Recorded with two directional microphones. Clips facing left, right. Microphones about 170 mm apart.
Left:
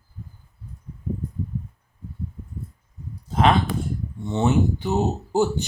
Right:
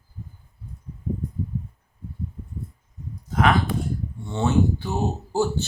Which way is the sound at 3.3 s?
25° left (ahead or behind).